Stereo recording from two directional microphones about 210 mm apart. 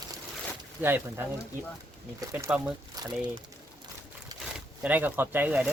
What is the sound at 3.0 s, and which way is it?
Crumpling, 20° right (ahead or behind).